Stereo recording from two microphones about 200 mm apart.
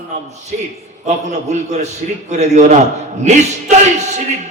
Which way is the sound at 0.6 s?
35° right (ahead or behind).